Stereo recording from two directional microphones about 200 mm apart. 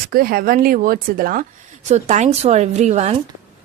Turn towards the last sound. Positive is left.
turn(degrees=-35)  # may be behind; listen again after turning